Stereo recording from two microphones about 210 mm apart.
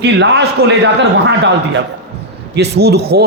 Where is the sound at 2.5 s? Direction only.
50° right (ahead or behind).